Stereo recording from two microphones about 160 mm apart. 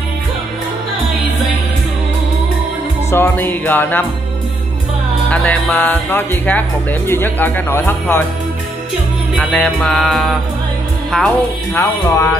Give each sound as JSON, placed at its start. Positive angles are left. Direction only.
{"t": 3.1, "sound": "speech", "side_deg": 15}
{"t": 5.3, "sound": "speech", "side_deg": 10}
{"t": 9.4, "sound": "music", "side_deg": 5}
{"t": 11.1, "sound": "speech", "side_deg": 0}
{"t": 11.7, "sound": "speech", "side_deg": 20}